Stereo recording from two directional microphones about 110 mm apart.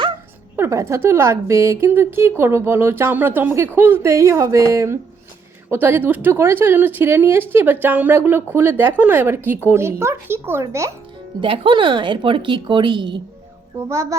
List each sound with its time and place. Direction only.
0.5 s a woman's voice: 25° right (ahead or behind)
11.3 s speech: 50° right (ahead or behind)
13.7 s a woman's voice: 25° right (ahead or behind)